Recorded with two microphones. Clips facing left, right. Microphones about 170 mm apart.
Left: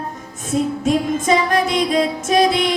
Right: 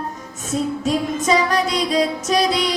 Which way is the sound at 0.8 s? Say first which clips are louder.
Left 2 dB; 50° left (ahead or behind).